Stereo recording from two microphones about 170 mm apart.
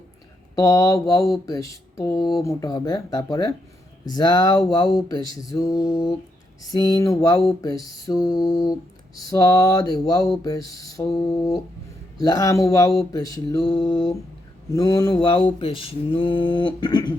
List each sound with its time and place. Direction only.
0.5 s mantra: 20° left (ahead or behind)